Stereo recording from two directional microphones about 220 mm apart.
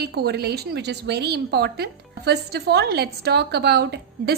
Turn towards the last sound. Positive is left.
turn(degrees=-50)  # may be behind; listen again after turning